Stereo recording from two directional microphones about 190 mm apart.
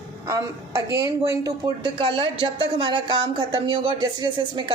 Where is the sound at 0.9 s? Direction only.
15° right (ahead or behind).